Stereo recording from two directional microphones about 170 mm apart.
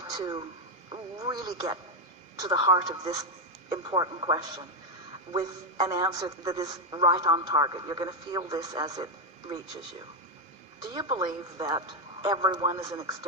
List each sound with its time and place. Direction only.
0.1 s a man's voice: 25° right (ahead or behind)
10.8 s a man's voice: 25° right (ahead or behind)